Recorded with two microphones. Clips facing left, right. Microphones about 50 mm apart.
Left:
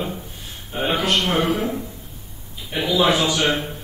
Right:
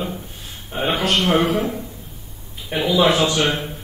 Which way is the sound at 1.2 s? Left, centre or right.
Right.